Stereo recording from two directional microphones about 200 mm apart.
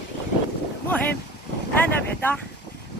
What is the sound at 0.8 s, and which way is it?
Boat, 10° left (ahead or behind).